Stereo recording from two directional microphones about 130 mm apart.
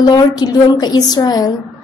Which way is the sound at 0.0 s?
30° left (ahead or behind).